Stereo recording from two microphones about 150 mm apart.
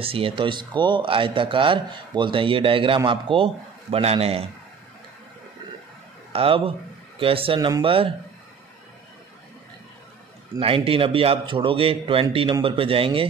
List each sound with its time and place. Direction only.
0.0 s speech: 40° right (ahead or behind)
6.3 s speech: 40° right (ahead or behind)
10.6 s speech: 35° right (ahead or behind)